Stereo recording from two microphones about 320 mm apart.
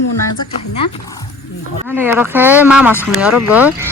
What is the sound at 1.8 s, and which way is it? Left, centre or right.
Speech, centre.